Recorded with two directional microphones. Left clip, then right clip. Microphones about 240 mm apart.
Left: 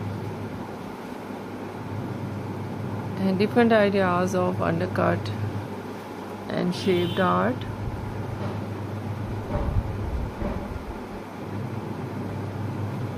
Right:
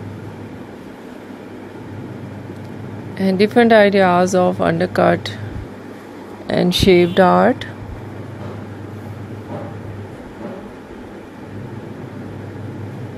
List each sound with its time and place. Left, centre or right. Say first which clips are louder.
3.2 s speech: right 8 dB; right
6.4 s speech: right 12 dB; right